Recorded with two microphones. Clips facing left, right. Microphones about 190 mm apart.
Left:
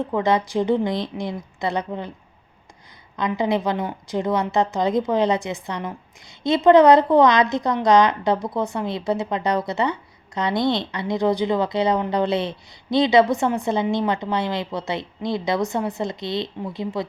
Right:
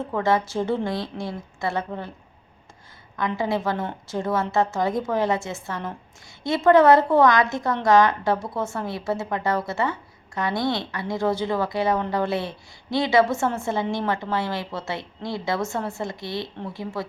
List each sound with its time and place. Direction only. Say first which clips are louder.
0.0 s a woman's voice: left 2 dB; 15° left (ahead or behind)
3.2 s a woman's voice: left 3 dB; 20° left (ahead or behind)